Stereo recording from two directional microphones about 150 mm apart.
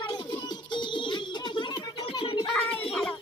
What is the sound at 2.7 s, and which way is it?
Music, 40° left (ahead or behind).